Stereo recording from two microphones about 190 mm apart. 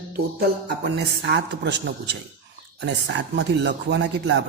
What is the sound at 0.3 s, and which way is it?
Speech, 60° right (ahead or behind).